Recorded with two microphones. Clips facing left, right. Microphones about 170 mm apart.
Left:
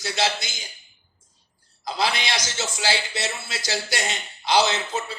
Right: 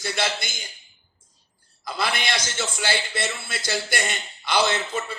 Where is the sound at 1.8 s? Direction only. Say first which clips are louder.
Left 2 dB; 55° right (ahead or behind).